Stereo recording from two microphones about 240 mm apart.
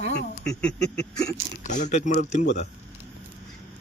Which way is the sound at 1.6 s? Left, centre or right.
Left.